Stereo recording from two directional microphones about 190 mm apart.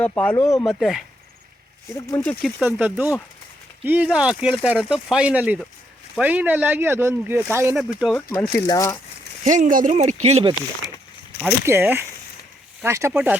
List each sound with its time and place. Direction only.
0.0 s speech: 10° left (ahead or behind)
2.0 s speech: 15° left (ahead or behind)
2.6 s speech: 10° right (ahead or behind)
8.6 s speech: 15° left (ahead or behind)
9.4 s speech: 40° right (ahead or behind)
11.4 s speech: 10° right (ahead or behind)